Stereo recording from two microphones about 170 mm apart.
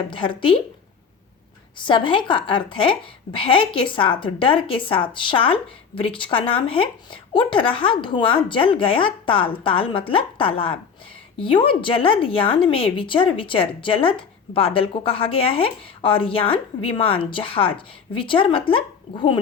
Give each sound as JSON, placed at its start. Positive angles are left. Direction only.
{"t": 0.1, "sound": "a woman's voice", "side_deg": 30}
{"t": 1.8, "sound": "a woman's voice", "side_deg": 30}